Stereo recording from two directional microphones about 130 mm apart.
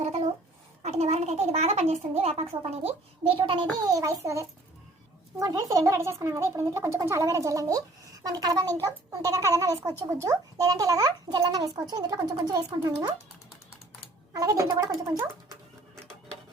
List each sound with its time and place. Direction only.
0.8 s a child's voice: 60° right (ahead or behind); by 3.7 s 40° right (ahead or behind)
3.8 s speech: 25° right (ahead or behind)
14.3 s speech: 25° right (ahead or behind)